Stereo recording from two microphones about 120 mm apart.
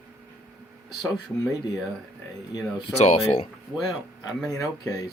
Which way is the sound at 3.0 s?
65° left (ahead or behind).